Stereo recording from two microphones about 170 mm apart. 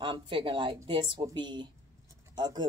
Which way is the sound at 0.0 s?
30° right (ahead or behind).